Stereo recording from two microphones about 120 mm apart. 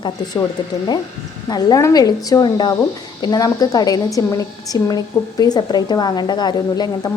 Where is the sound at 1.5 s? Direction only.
35° left (ahead or behind).